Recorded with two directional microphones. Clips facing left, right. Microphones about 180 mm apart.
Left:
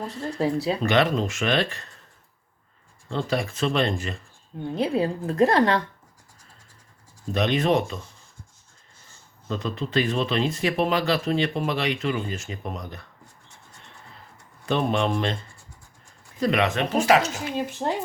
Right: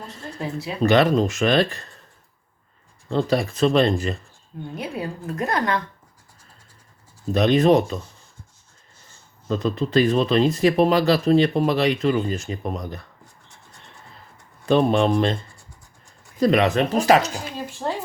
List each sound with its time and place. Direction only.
0.0 s speech: 35° left (ahead or behind)
0.8 s speech: 35° right (ahead or behind)
3.1 s speech: 35° right (ahead or behind)
4.7 s a woman's voice: 25° left (ahead or behind)
7.3 s speech: 35° right (ahead or behind)
9.5 s speech: 40° right (ahead or behind)
14.7 s speech: 35° right (ahead or behind)
16.4 s speech: 35° right (ahead or behind)
17.7 s a woman's voice: 20° left (ahead or behind)